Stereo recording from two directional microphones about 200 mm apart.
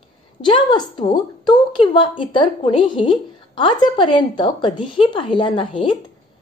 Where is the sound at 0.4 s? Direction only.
25° left (ahead or behind).